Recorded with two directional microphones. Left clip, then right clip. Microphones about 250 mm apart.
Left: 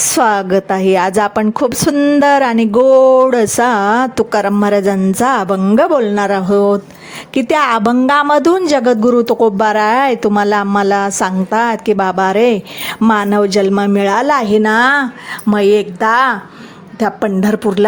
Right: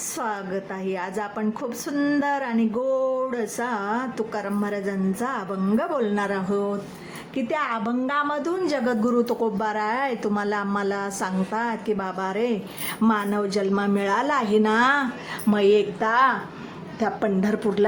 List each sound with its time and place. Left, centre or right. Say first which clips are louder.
0.1 s a woman's voice: left 16 dB; left